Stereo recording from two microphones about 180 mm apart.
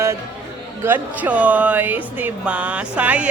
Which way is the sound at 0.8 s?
10° right (ahead or behind).